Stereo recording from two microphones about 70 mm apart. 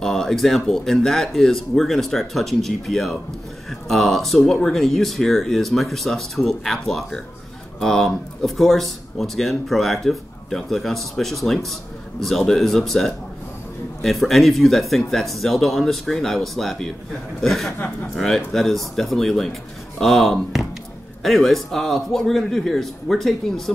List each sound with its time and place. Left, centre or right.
0.0 s speech: centre